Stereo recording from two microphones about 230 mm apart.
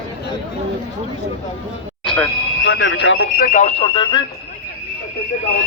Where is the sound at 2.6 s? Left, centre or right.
Left.